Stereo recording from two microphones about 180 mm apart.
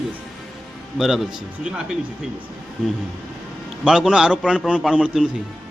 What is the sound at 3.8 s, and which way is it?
A man's voice, 5° right (ahead or behind).